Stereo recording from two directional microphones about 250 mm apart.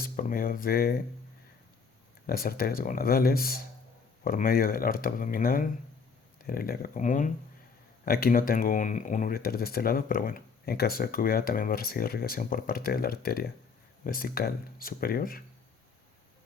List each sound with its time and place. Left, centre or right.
0.0 s speech: left
2.2 s speech: left